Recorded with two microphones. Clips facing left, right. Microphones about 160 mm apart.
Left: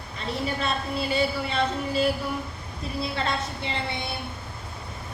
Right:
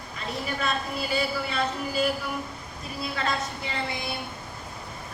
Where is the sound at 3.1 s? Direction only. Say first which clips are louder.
Left 1 dB; 30° left (ahead or behind).